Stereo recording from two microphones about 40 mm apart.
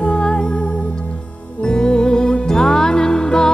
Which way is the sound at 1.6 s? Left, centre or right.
Centre.